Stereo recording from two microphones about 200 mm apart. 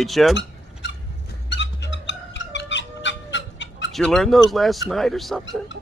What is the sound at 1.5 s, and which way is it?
Music, 65° left (ahead or behind).